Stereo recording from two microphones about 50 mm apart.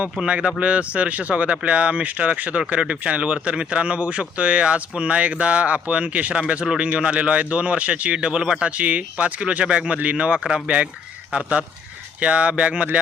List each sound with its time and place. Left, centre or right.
0.3 s speech: right
8.4 s a man's voice: centre
8.6 s speech: right